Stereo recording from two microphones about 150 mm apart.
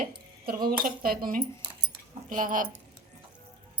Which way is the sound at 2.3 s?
60° right (ahead or behind).